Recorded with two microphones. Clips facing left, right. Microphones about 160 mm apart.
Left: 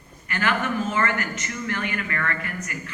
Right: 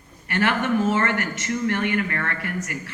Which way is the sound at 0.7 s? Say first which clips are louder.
Right 4 dB; 70° right (ahead or behind).